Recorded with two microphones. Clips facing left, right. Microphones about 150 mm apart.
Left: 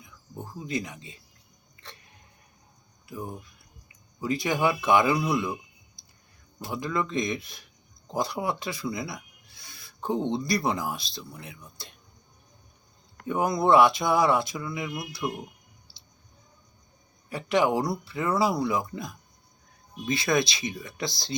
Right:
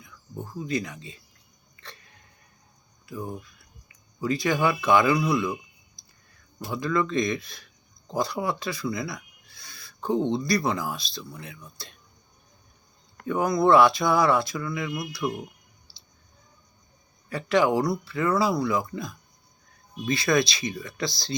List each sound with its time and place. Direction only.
0.6 s speech: 20° left (ahead or behind)
1.8 s a sound: 15° left (ahead or behind)
4.2 s speech: 20° left (ahead or behind)
6.7 s speech: 20° left (ahead or behind)
13.2 s speech: 20° left (ahead or behind)
15.9 s music: 20° left (ahead or behind)
17.2 s speech: 15° left (ahead or behind)